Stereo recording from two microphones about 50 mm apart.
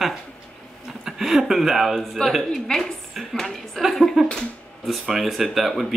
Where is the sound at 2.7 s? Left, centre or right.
Centre.